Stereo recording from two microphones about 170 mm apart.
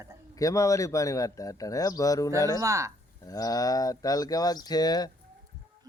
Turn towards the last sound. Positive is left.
turn(degrees=25)  # may be behind; listen again after turning